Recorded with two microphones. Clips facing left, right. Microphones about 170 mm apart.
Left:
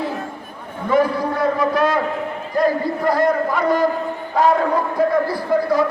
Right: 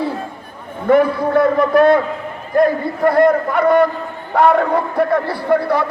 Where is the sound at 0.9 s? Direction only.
60° right (ahead or behind).